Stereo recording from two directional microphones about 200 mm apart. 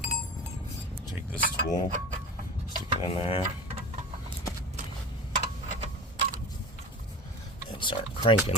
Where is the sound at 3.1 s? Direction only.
30° left (ahead or behind).